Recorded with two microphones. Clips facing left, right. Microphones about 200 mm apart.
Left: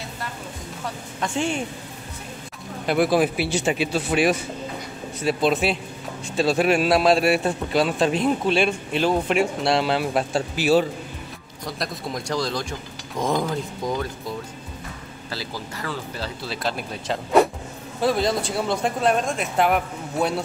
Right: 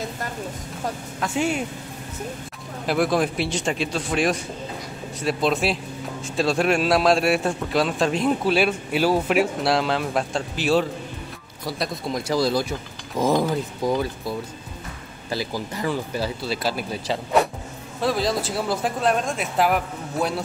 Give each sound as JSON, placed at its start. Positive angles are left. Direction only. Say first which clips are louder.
{"t": 1.2, "sound": "speech", "louder": "right 1 dB", "side_deg": -5}
{"t": 2.9, "sound": "a man's voice", "louder": "left 2 dB", "side_deg": 0}
{"t": 15.2, "sound": "speech", "louder": "right 6 dB", "side_deg": -15}
{"t": 16.4, "sound": "a man's voice", "louder": "right 2 dB", "side_deg": -5}